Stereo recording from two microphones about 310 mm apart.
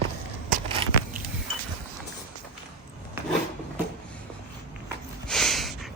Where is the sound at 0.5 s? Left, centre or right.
Right.